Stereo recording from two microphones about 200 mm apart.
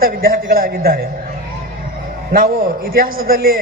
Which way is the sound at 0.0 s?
50° right (ahead or behind).